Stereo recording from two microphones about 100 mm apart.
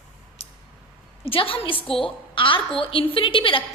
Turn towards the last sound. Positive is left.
turn(degrees=60)  # may be behind; listen again after turning